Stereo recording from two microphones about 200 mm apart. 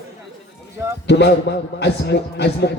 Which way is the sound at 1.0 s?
60° left (ahead or behind).